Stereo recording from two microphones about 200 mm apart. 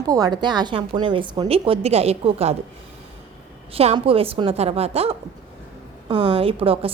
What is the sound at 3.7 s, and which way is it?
A woman's voice, 30° right (ahead or behind).